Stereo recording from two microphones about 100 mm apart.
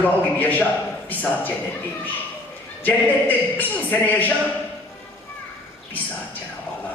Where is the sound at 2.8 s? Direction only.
15° left (ahead or behind).